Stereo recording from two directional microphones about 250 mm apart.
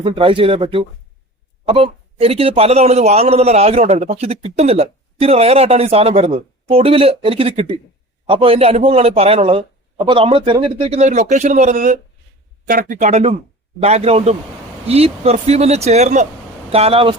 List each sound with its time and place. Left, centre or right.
0.0 s a man's voice: right